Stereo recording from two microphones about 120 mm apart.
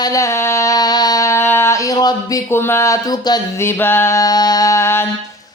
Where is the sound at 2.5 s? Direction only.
20° left (ahead or behind).